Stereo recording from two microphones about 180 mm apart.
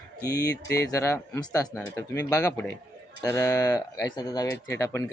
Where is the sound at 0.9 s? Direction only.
15° left (ahead or behind).